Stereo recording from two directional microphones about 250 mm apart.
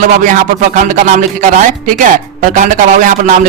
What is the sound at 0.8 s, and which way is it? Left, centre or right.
Speech, right.